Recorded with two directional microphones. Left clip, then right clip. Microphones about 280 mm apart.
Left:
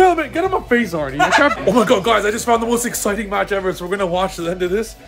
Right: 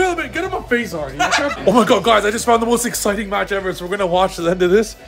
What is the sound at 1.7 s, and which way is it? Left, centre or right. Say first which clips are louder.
Speech: right 1 dB; centre.